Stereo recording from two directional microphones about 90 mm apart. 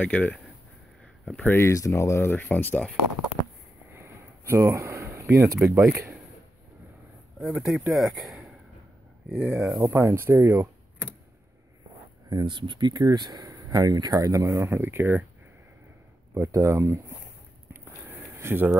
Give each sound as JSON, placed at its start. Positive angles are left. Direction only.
{"t": 0.0, "sound": "speech", "side_deg": 15}
{"t": 1.4, "sound": "speech", "side_deg": 25}
{"t": 1.7, "sound": "speech", "side_deg": 35}
{"t": 3.9, "sound": "a sound", "side_deg": -30}
{"t": 7.3, "sound": "speech", "side_deg": 0}
{"t": 9.3, "sound": "speech", "side_deg": -15}
{"t": 9.9, "sound": "speech", "side_deg": -25}
{"t": 12.3, "sound": "speech", "side_deg": -55}
{"t": 14.7, "sound": "speech", "side_deg": -30}
{"t": 16.3, "sound": "speech", "side_deg": -35}
{"t": 18.3, "sound": "speech", "side_deg": -25}